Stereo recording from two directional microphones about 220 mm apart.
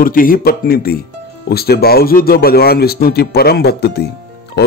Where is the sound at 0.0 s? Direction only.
40° left (ahead or behind).